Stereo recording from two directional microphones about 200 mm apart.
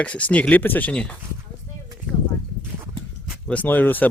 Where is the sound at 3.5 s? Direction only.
10° left (ahead or behind).